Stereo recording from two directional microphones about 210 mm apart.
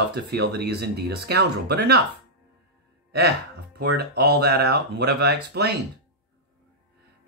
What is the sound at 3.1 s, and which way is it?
Speech, 50° right (ahead or behind).